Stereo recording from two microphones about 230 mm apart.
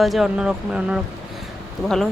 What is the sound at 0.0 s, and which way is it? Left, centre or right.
Speech, centre.